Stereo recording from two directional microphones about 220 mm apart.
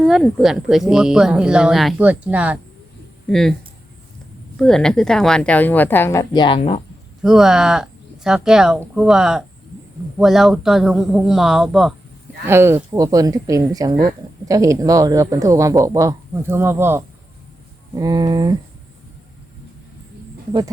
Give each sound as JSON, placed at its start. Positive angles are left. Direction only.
{"t": 0.0, "sound": "speech", "side_deg": 0}
{"t": 4.5, "sound": "a woman's voice", "side_deg": 0}
{"t": 7.2, "sound": "speech", "side_deg": 0}